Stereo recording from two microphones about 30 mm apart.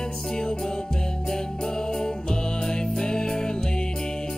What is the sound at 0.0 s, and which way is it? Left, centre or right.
Music, left.